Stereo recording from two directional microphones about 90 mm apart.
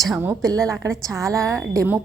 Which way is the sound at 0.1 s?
20° right (ahead or behind).